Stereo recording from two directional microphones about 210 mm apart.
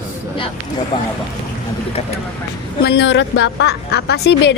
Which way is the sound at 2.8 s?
55° left (ahead or behind).